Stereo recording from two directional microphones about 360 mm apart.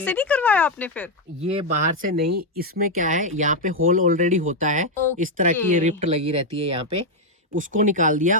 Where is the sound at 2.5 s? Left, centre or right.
Right.